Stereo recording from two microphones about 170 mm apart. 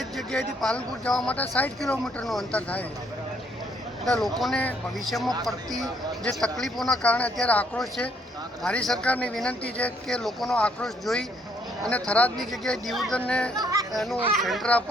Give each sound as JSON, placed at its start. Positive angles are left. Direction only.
{"t": 0.2, "sound": "speech", "side_deg": 0}
{"t": 4.0, "sound": "speech", "side_deg": 0}
{"t": 13.6, "sound": "speech", "side_deg": -20}
{"t": 13.9, "sound": "speech", "side_deg": 0}